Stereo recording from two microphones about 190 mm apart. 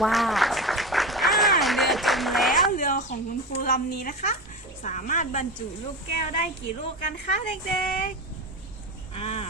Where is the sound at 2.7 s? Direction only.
45° left (ahead or behind).